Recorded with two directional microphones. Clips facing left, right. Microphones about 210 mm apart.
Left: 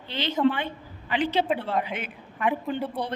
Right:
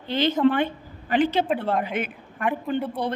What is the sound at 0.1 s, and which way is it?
A woman's voice, 50° right (ahead or behind).